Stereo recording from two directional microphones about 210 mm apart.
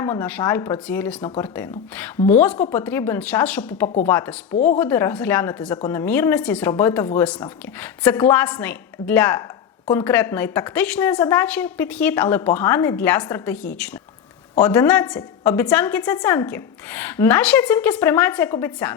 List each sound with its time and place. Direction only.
0.0 s a woman's voice: 10° left (ahead or behind)
4.5 s speech: 40° left (ahead or behind)
4.8 s a woman's voice: 10° left (ahead or behind)